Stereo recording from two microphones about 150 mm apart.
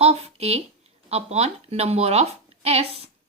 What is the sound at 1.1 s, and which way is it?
A woman's voice, 45° right (ahead or behind).